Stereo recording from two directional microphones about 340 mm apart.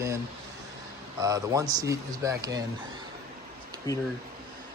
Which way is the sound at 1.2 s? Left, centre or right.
Centre.